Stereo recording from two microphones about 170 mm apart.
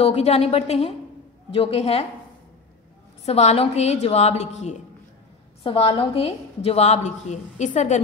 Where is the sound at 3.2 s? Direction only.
40° left (ahead or behind).